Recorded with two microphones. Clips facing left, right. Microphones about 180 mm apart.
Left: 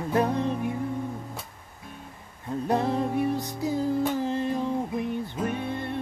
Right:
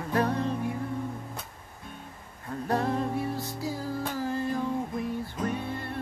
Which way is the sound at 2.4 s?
20° left (ahead or behind).